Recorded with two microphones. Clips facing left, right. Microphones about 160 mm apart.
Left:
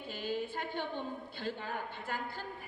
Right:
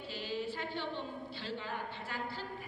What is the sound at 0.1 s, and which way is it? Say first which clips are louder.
A woman's voice: left 2 dB; 50° left (ahead or behind).